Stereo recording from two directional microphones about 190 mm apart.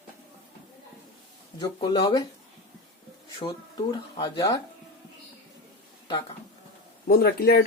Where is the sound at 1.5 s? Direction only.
20° left (ahead or behind).